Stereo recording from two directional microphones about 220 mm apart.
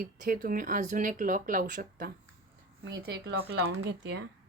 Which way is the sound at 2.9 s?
55° right (ahead or behind).